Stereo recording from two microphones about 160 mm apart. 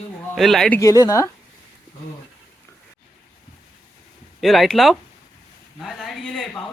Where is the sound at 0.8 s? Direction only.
20° left (ahead or behind).